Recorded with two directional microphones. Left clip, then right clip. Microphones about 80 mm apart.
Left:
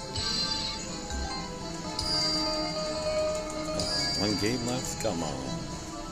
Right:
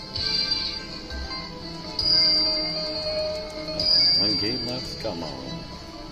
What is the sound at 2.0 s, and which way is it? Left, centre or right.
Music, right.